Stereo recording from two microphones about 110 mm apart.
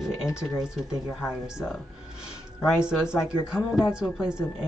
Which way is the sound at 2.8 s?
10° right (ahead or behind).